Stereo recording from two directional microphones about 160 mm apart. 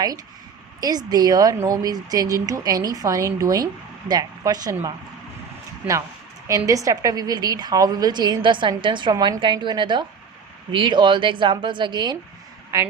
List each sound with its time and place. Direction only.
0.8 s a woman's voice: 25° right (ahead or behind)
5.8 s speech: 10° right (ahead or behind)
6.7 s a woman's voice: 20° right (ahead or behind)